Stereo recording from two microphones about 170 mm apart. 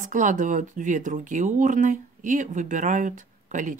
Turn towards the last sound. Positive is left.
turn(degrees=-50)  # may be behind; listen again after turning